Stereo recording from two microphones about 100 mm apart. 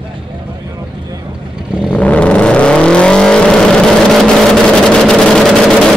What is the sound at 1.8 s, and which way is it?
Vehicle, 15° left (ahead or behind).